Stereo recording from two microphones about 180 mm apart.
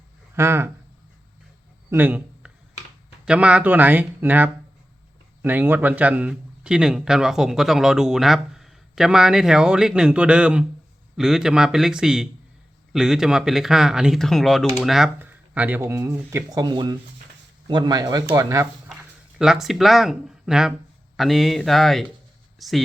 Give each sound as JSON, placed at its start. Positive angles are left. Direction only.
{"t": 0.3, "sound": "speech", "side_deg": -15}
{"t": 1.9, "sound": "a sound", "side_deg": -10}
{"t": 3.2, "sound": "a man's voice", "side_deg": -5}
{"t": 19.4, "sound": "a man's voice", "side_deg": 0}